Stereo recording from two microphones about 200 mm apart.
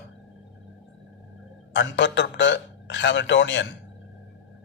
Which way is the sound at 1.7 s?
60° left (ahead or behind).